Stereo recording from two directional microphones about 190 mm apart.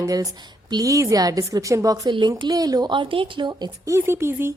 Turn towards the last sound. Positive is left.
turn(degrees=-15)  # may be behind; listen again after turning